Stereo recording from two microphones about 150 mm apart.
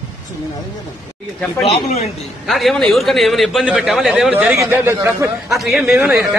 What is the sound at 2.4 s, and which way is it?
A man's voice, centre (ahead or behind).